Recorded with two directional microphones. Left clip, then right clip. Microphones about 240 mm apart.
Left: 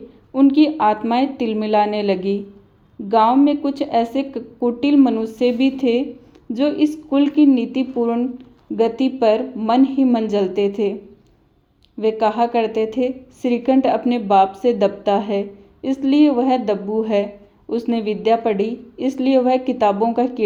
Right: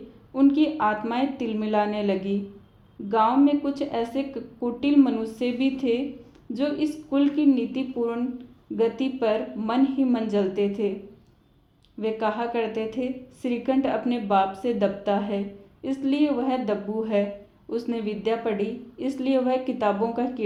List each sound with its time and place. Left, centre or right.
0.3 s a woman's voice: left
11.9 s a woman's voice: left